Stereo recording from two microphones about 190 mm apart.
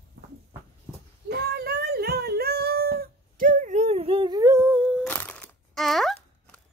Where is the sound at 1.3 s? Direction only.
55° right (ahead or behind); by 5.0 s 5° right (ahead or behind).